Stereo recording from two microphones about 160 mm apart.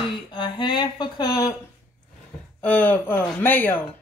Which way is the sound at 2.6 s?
10° left (ahead or behind).